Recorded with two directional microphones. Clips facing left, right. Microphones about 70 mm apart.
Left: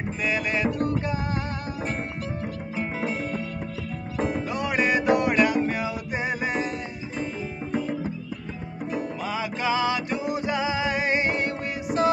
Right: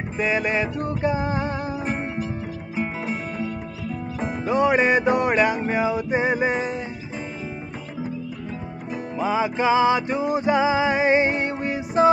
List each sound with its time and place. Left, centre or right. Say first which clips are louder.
0.2 s music: right 4 dB; right
4.2 s music: right 5 dB; right
9.2 s music: right 11 dB; right